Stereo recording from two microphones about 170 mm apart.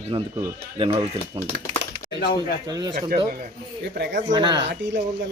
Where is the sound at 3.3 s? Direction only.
70° right (ahead or behind).